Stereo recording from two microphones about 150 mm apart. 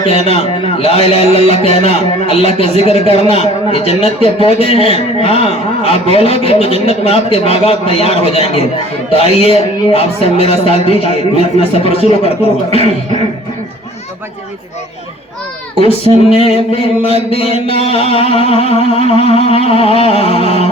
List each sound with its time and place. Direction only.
0.1 s a man's voice: 45° left (ahead or behind)
15.8 s music: 40° left (ahead or behind)